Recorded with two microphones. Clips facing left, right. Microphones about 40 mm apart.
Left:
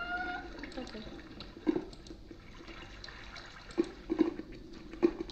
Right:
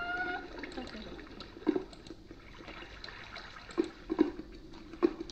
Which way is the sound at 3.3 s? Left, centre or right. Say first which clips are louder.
Even; centre.